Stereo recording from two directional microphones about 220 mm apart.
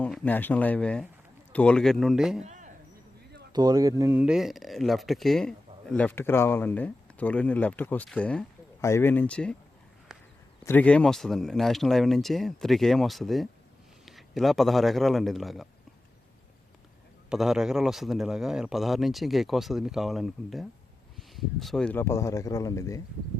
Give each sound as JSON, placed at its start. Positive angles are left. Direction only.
{"t": 0.0, "sound": "speech", "side_deg": 5}
{"t": 2.4, "sound": "a sound", "side_deg": -35}
{"t": 3.5, "sound": "speech", "side_deg": -20}
{"t": 10.1, "sound": "a sound", "side_deg": 0}
{"t": 10.6, "sound": "a man's voice", "side_deg": 10}
{"t": 17.2, "sound": "speech", "side_deg": 0}